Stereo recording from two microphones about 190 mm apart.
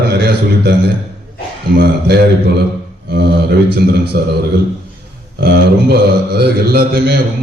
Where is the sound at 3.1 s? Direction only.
55° right (ahead or behind).